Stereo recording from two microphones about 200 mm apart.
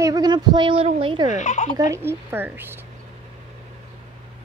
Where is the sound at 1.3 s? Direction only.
35° left (ahead or behind).